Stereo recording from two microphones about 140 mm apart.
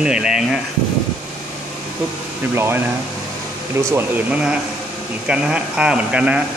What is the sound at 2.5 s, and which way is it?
Speech, 15° right (ahead or behind).